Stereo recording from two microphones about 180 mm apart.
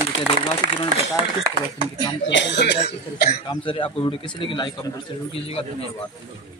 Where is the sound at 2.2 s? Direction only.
85° left.